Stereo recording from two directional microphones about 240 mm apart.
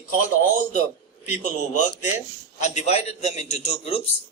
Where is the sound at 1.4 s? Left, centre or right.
Left.